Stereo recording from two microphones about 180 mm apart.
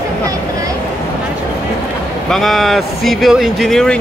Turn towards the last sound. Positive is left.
turn(degrees=5)  # may be behind; listen again after turning